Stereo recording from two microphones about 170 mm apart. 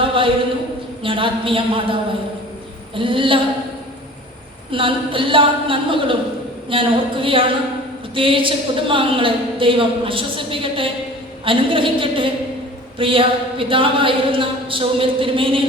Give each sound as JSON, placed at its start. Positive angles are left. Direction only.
{"t": 0.0, "sound": "a sound", "side_deg": -30}
{"t": 1.0, "sound": "a woman's voice", "side_deg": -30}
{"t": 4.7, "sound": "a woman's voice", "side_deg": -30}